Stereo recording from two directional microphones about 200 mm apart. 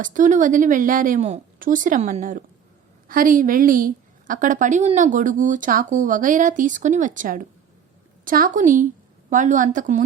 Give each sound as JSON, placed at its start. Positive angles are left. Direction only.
{"t": 0.0, "sound": "a woman's voice", "side_deg": -40}